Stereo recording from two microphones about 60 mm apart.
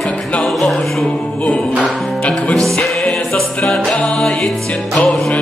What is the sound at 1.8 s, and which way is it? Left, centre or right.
Music, left.